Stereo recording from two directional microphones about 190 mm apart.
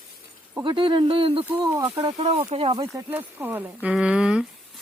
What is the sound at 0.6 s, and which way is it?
Speech, 25° right (ahead or behind).